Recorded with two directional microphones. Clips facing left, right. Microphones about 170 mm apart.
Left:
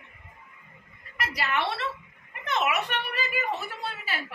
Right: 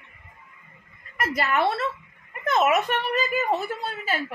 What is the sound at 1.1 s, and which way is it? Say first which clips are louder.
A woman's voice: right 5 dB; 45° right (ahead or behind).